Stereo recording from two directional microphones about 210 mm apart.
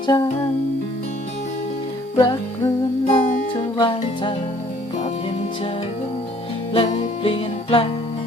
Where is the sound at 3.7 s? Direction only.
25° left (ahead or behind).